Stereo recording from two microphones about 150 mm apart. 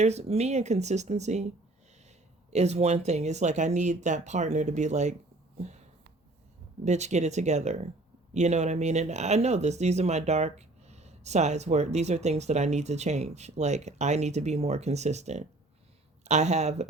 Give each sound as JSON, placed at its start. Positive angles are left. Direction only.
{"t": 0.0, "sound": "speech", "side_deg": -45}
{"t": 5.5, "sound": "a sound", "side_deg": -50}
{"t": 6.8, "sound": "speech", "side_deg": -50}